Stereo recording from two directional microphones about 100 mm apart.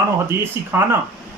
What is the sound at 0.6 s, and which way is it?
Speech, 25° right (ahead or behind).